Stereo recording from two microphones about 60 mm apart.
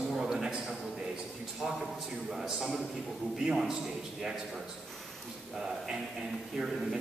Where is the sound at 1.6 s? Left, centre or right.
Centre.